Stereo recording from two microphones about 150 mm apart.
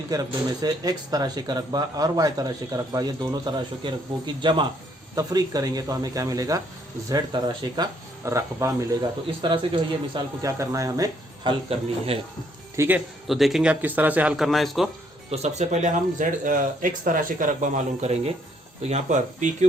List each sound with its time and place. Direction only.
0.1 s speech: 25° right (ahead or behind)
9.2 s speech: 35° right (ahead or behind)
10.4 s speech: 20° right (ahead or behind)
11.7 s speech: 40° right (ahead or behind)
12.7 s speech: 20° right (ahead or behind)
13.2 s a man's voice: centre (ahead or behind)
15.3 s speech: 50° right (ahead or behind)